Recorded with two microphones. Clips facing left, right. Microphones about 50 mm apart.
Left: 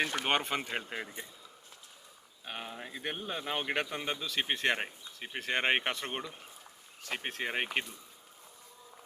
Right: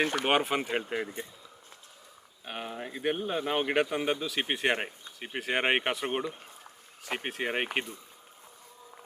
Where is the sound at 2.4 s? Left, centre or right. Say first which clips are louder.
Right 4 dB; centre.